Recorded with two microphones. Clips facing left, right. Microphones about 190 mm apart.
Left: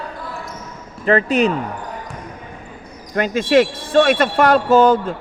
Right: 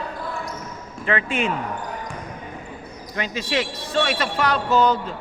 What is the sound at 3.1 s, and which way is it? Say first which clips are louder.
Speech: left 11 dB; 50° left (ahead or behind).